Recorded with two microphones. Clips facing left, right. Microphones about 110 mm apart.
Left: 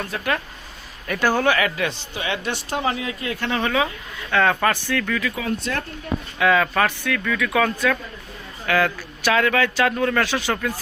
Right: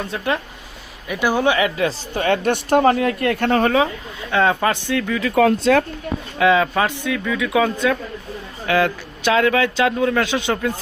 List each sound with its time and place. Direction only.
0.1 s a man's voice: 25° right (ahead or behind)
1.0 s a man's voice: 10° right (ahead or behind); by 2.0 s 30° right (ahead or behind)
2.1 s speech: 50° right (ahead or behind)
4.3 s a man's voice: 20° right (ahead or behind)
5.3 s speech: 80° right
6.4 s a man's voice: 25° right (ahead or behind)